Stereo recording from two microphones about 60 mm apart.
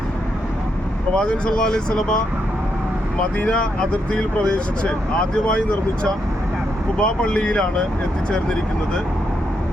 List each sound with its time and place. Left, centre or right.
1.1 s speech: centre
3.3 s speech: centre